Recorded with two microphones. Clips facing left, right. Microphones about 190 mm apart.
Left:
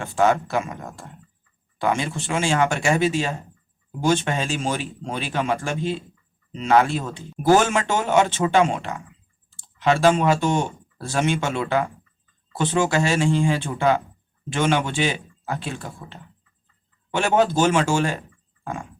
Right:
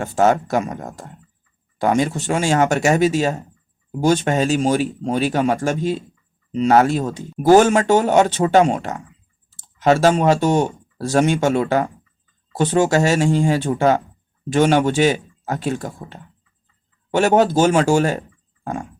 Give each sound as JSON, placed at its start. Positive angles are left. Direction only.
{"t": 0.0, "sound": "speech", "side_deg": -40}